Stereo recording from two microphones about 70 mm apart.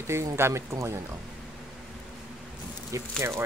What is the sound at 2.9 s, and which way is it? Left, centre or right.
Speech, right.